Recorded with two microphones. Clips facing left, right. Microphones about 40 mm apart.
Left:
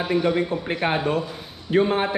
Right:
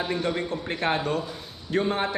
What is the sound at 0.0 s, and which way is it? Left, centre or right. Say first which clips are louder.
A man's voice: left 6 dB; centre.